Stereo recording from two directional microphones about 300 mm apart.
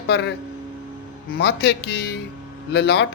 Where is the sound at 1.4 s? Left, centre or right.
Left.